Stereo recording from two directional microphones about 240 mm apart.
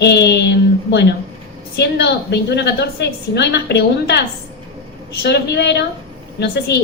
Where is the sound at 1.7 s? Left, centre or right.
Left.